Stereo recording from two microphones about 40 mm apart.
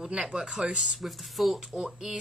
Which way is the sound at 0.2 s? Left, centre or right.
Centre.